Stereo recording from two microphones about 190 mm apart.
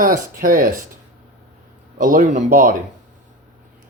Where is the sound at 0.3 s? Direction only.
45° right (ahead or behind).